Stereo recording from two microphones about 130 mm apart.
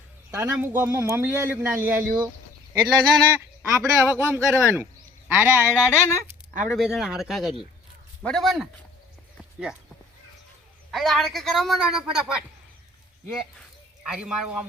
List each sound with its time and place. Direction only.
0.3 s a man's voice: 20° right (ahead or behind)
2.7 s a woman's voice: 5° right (ahead or behind)
3.2 s a man's voice: 20° right (ahead or behind)
5.5 s speech: 15° left (ahead or behind)
6.2 s a woman's voice: 5° right (ahead or behind)
9.4 s clip-clop: 5° right (ahead or behind)
10.9 s a woman's voice: centre (ahead or behind)
14.0 s a man's voice: 5° right (ahead or behind)